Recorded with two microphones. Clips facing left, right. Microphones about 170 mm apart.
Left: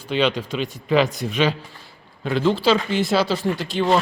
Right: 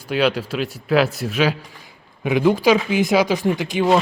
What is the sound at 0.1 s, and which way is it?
A man's voice, 10° right (ahead or behind).